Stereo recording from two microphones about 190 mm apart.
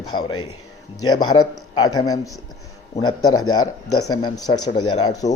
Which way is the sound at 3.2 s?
90° left.